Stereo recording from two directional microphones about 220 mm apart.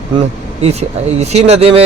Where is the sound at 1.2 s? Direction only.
30° right (ahead or behind).